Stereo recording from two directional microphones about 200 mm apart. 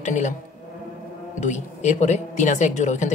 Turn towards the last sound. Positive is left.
turn(degrees=35)  # may be behind; listen again after turning